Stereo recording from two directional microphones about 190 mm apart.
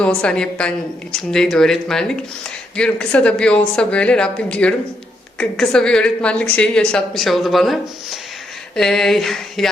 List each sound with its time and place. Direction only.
0.0 s a woman's voice: 5° left (ahead or behind)